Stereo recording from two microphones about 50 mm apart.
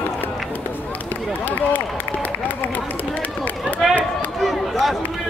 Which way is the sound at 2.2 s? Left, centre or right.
Left.